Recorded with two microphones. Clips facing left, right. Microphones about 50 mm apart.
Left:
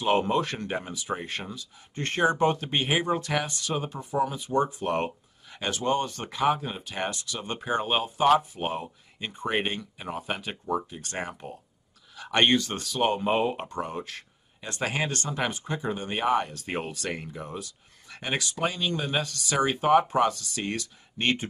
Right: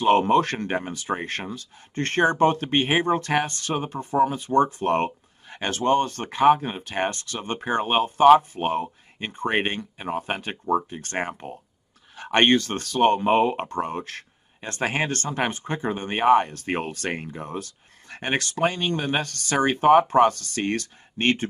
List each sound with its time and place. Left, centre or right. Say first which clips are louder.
0.0 s speech: right 6 dB; right